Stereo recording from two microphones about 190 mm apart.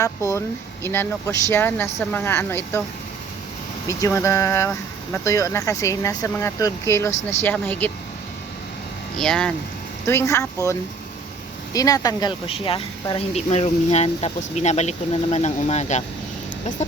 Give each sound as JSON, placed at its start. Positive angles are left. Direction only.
{"t": 0.0, "sound": "speech", "side_deg": 15}
{"t": 3.8, "sound": "speech", "side_deg": 15}
{"t": 9.1, "sound": "speech", "side_deg": 5}